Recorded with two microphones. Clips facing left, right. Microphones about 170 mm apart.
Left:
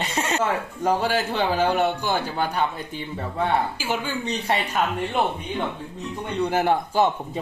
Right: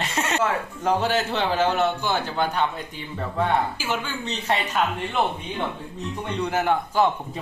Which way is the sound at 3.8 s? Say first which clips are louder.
Left 2 dB; 10° left (ahead or behind).